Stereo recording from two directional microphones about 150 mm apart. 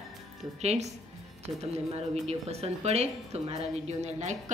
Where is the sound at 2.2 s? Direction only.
45° right (ahead or behind).